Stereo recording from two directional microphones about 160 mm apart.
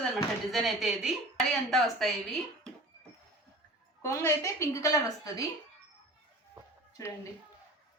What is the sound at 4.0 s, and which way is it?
A woman's voice, 20° left (ahead or behind).